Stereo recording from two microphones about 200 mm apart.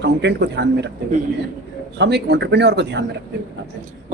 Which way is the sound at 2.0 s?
60° right (ahead or behind).